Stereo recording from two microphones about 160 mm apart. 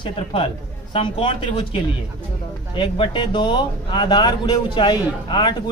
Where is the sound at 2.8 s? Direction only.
30° left (ahead or behind).